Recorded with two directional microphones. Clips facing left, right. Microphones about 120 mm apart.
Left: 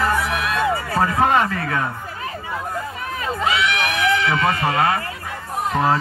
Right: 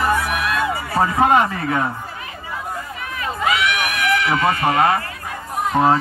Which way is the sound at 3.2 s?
30° left (ahead or behind).